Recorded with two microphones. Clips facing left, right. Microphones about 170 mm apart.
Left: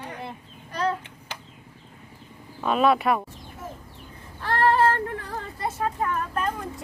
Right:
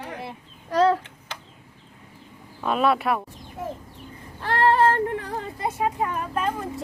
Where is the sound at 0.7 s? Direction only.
90° right.